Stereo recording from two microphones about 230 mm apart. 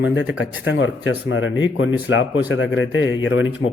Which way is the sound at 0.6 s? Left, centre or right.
Left.